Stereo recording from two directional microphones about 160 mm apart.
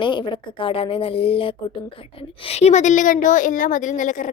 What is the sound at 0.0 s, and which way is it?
A woman's voice, 30° left (ahead or behind).